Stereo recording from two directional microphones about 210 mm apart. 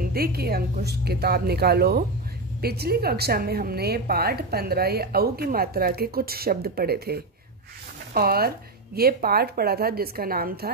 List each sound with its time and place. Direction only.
0.0 s a woman's voice: 45° right (ahead or behind)